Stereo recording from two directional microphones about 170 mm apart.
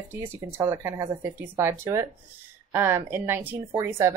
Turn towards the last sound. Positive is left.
turn(degrees=-15)  # may be behind; listen again after turning